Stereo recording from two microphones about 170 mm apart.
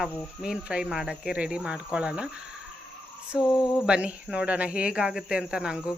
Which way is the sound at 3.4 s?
25° left (ahead or behind).